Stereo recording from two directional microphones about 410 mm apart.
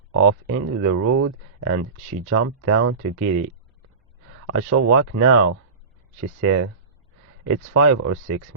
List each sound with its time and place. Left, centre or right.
0.2 s speech: right